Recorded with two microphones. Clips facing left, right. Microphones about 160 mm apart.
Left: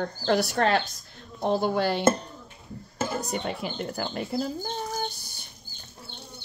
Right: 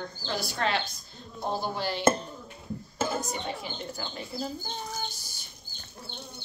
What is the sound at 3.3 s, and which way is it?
Speech, 65° left (ahead or behind).